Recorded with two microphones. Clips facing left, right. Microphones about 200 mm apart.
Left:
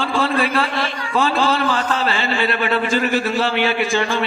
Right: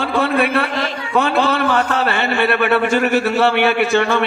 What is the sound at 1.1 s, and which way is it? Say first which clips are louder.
A man's voice: right 2 dB; 60° right (ahead or behind).